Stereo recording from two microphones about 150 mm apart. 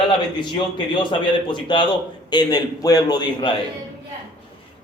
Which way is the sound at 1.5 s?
30° left (ahead or behind).